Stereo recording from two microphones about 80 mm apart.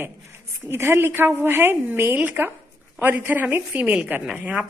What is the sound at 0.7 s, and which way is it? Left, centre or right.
A woman's voice, right.